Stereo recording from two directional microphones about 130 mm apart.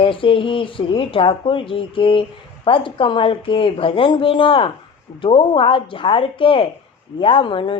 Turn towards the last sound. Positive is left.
turn(degrees=40)  # may be behind; listen again after turning